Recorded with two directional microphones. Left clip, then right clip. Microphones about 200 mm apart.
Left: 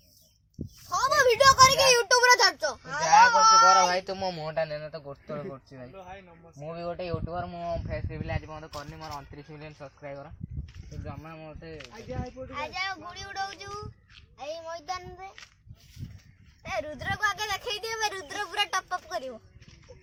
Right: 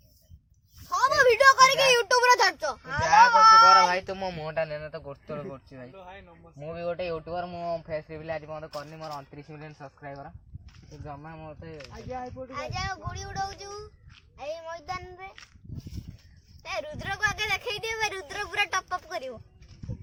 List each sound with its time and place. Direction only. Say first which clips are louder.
0.9 s a sound: right 2 dB; 10° right (ahead or behind)
2.8 s a sound: even; centre (ahead or behind)
3.8 s speech: even; 10° left (ahead or behind)
5.9 s speech: left 1 dB; 25° left (ahead or behind)
6.6 s speech: right 3 dB; centre (ahead or behind)
7.4 s speech: right 1 dB; 25° right (ahead or behind)
11.2 s speech: right 1 dB; 40° right (ahead or behind)
11.9 s speech: right 4 dB; 25° right (ahead or behind)
14.3 s speech: right 1 dB; 5° right (ahead or behind)
16.6 s speech: left 1 dB; 40° right (ahead or behind); by 19.4 s 15° right (ahead or behind)